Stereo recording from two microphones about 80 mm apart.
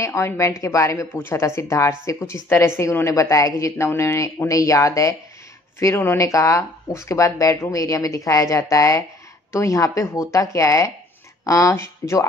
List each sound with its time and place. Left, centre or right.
0.0 s speech: left